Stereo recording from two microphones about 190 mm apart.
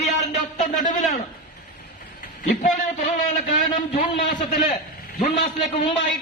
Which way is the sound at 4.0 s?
45° left (ahead or behind).